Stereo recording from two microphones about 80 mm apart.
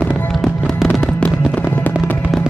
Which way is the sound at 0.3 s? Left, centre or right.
Centre.